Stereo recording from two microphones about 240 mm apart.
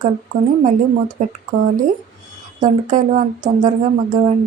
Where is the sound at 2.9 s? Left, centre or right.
Right.